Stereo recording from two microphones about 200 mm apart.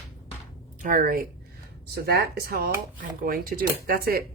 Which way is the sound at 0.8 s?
45° right (ahead or behind).